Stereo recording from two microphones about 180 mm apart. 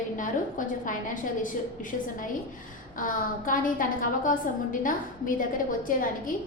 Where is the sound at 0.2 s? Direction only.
45° left (ahead or behind).